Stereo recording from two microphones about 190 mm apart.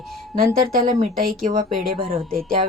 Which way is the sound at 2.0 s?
30° right (ahead or behind).